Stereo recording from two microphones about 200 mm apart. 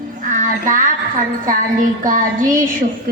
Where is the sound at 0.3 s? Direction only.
40° right (ahead or behind).